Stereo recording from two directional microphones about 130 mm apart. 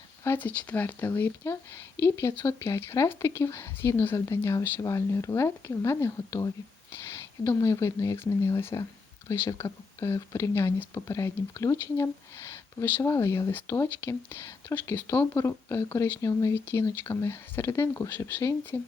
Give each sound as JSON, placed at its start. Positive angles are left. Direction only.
{"t": 0.3, "sound": "speech", "side_deg": 15}